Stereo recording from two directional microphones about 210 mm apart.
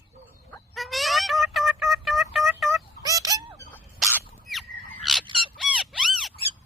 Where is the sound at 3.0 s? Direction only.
15° right (ahead or behind).